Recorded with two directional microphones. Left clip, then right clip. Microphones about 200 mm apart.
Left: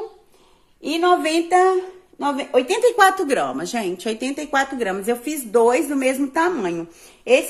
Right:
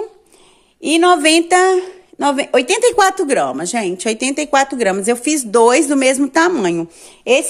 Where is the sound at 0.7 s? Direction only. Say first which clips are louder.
Right 6 dB; 55° right (ahead or behind).